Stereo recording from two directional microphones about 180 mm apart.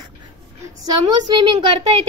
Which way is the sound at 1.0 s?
25° right (ahead or behind).